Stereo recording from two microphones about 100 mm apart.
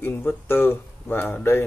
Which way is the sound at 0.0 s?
20° left (ahead or behind).